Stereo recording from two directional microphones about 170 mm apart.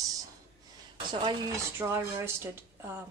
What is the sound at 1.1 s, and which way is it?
Speech, 25° right (ahead or behind).